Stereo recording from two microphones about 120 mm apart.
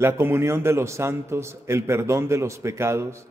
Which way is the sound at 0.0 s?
20° right (ahead or behind).